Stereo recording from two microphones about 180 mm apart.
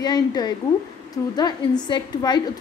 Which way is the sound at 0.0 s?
25° left (ahead or behind).